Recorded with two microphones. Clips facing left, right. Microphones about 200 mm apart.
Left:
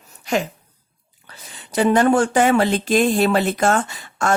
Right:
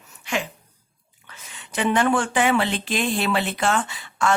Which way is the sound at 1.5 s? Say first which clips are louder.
Left 6 dB; 40° left (ahead or behind).